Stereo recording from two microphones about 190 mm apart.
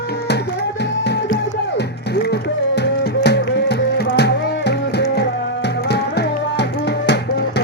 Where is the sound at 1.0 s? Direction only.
60° left (ahead or behind).